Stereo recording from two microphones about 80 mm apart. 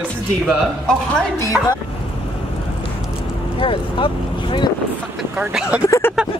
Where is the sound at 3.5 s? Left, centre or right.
Left.